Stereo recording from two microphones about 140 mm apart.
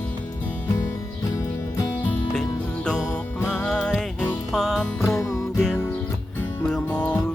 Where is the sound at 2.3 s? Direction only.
5° left (ahead or behind).